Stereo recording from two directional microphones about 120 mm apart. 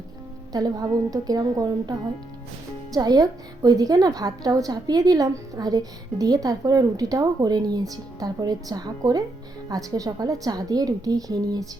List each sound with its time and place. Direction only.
0.5 s a woman's voice: 30° right (ahead or behind)